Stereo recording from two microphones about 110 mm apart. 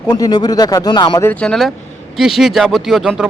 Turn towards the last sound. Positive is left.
turn(degrees=0)  # may be behind; listen again after turning